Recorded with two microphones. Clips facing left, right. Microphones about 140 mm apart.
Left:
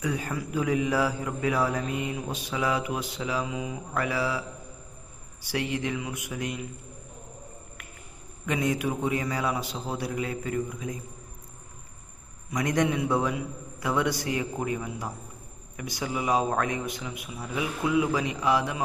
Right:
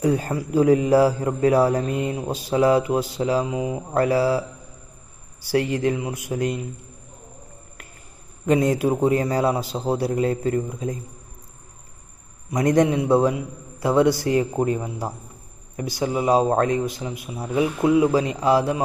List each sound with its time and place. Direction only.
0.0 s a man's voice: 35° right (ahead or behind)
8.4 s a man's voice: 35° right (ahead or behind)
12.5 s a man's voice: 30° right (ahead or behind)